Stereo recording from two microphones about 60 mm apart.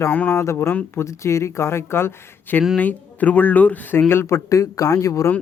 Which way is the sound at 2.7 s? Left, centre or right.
Left.